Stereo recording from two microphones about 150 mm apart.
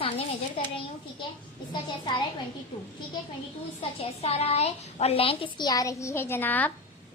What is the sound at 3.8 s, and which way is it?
A woman's voice, 40° left (ahead or behind).